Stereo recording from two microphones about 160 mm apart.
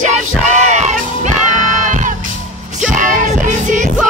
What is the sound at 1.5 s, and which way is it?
Crowd, 50° right (ahead or behind).